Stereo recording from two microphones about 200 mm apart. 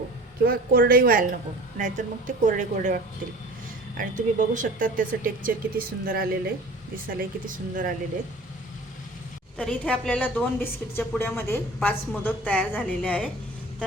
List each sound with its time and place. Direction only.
0.4 s speech: 45° right (ahead or behind)
9.6 s a woman's voice: 5° left (ahead or behind)